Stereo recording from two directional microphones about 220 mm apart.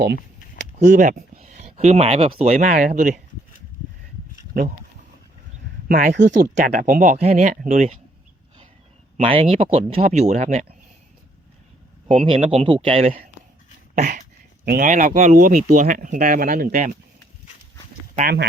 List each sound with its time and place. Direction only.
0.8 s speech: 35° right (ahead or behind)
5.9 s speech: 40° right (ahead or behind)
9.1 s speech: 25° right (ahead or behind)
12.0 s speech: 25° right (ahead or behind)
13.9 s a sound: 40° right (ahead or behind)
14.6 s speech: 40° right (ahead or behind)
18.1 s speech: 35° right (ahead or behind)